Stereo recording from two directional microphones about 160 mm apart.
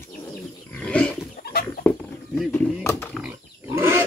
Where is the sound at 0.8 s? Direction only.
10° left (ahead or behind).